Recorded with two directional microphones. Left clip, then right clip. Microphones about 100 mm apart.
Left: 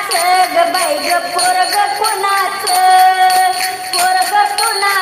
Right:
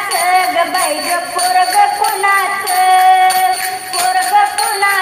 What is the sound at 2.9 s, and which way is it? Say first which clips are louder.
Music: even; 30° left (ahead or behind).